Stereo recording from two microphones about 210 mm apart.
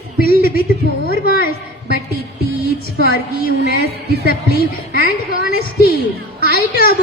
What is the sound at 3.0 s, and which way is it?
Speech, 45° left (ahead or behind).